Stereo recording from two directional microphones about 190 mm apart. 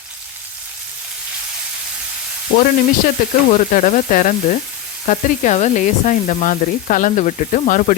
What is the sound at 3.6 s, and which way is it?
Sizzle, 45° left (ahead or behind).